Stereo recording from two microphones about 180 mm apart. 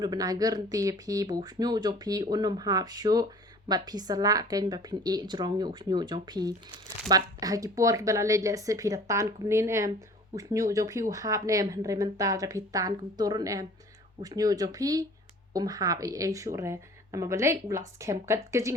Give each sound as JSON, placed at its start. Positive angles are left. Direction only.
{"t": 0.0, "sound": "speech", "side_deg": -20}